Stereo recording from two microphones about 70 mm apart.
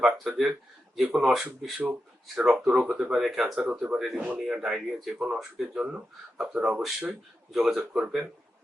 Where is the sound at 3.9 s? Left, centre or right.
Centre.